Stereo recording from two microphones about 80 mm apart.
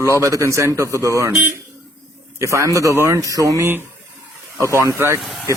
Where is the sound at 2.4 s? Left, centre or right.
Right.